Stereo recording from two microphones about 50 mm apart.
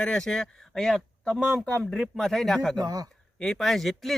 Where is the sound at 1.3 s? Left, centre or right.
Centre.